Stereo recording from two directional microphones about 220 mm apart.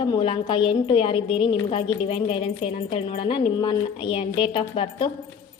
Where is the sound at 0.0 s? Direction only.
20° left (ahead or behind).